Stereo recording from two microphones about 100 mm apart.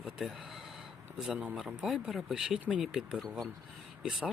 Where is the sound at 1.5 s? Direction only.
5° right (ahead or behind).